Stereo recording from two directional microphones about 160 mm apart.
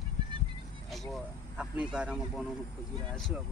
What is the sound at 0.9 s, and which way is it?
Speech, centre (ahead or behind).